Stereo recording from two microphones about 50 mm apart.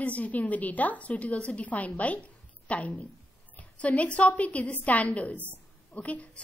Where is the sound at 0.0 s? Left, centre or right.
Left.